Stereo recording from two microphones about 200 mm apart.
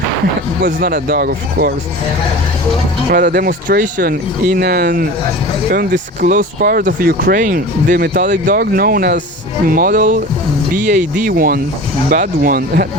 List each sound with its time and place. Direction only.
0.6 s speech: 45° right (ahead or behind)
3.1 s speech: 45° right (ahead or behind)